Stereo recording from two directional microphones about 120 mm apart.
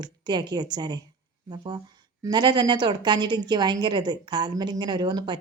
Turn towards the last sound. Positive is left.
turn(degrees=-40)  # may be behind; listen again after turning